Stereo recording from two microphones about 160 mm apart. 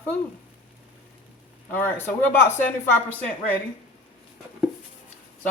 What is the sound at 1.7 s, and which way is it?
Speech, 15° left (ahead or behind).